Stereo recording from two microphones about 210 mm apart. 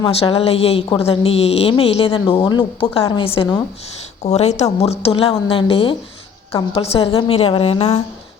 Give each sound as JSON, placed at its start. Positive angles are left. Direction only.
{"t": 0.0, "sound": "a woman's voice", "side_deg": 25}